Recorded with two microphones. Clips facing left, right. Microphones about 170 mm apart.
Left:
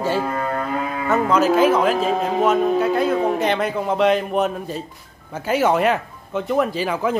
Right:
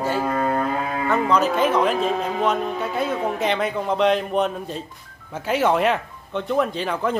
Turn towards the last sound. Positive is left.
turn(degrees=5)  # may be behind; listen again after turning